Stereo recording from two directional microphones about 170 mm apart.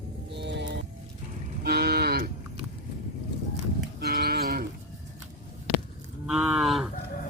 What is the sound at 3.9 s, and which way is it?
Livestock, 65° right (ahead or behind).